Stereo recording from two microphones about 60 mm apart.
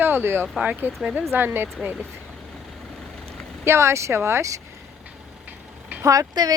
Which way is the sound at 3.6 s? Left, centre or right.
Right.